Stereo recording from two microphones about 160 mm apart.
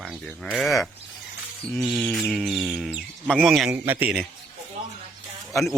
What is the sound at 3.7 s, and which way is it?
Speech, 10° right (ahead or behind).